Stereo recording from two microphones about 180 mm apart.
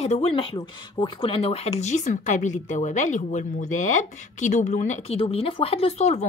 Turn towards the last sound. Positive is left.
turn(degrees=35)  # may be behind; listen again after turning